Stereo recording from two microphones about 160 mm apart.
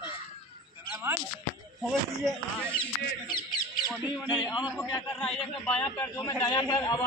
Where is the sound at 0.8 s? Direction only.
15° right (ahead or behind).